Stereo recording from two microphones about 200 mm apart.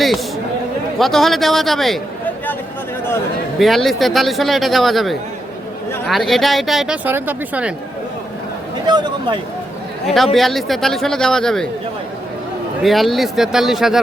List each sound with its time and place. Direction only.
0.9 s speech: centre (ahead or behind)
3.6 s speech: centre (ahead or behind)
8.9 s speech: 20° right (ahead or behind)
10.3 s speech: centre (ahead or behind)
12.8 s speech: centre (ahead or behind)